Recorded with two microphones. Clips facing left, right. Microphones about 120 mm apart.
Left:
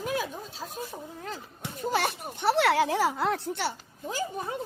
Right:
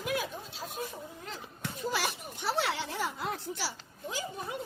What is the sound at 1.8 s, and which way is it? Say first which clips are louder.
Speech: left 5 dB; 50° left (ahead or behind).